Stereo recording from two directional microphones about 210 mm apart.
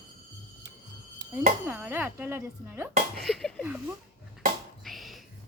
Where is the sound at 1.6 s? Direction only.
10° right (ahead or behind).